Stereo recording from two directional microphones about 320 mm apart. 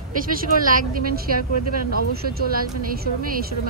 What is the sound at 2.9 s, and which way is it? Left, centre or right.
Speech, right.